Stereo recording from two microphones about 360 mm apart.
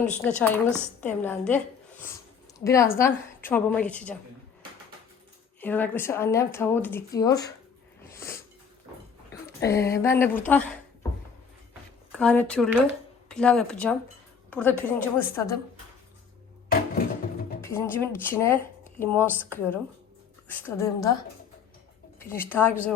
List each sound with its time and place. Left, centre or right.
0.0 s a woman's voice: centre
5.5 s speech: centre
8.1 s cat: centre
9.6 s speech: centre
12.1 s speech: centre
17.6 s speech: centre
22.2 s speech: centre